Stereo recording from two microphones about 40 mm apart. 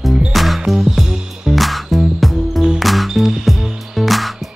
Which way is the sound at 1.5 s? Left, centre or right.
Centre.